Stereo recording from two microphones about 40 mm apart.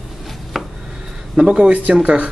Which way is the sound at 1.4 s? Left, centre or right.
Right.